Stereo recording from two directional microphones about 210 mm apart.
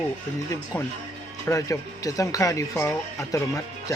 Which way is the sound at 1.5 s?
15° left (ahead or behind).